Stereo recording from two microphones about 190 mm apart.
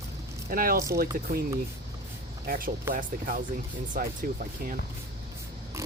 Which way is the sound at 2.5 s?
50° right (ahead or behind).